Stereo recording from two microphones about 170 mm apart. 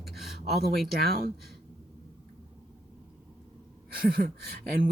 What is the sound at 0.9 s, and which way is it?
Speech, 65° right (ahead or behind).